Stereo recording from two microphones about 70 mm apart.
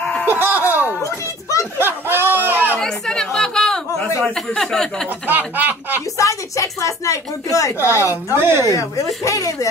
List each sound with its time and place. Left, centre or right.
0.4 s speech: right
1.8 s a sound: right
2.8 s chatter: centre
4.2 s speech: centre
5.2 s speech: right
6.1 s a woman's voice: left
8.4 s speech: right
8.6 s a woman's voice: left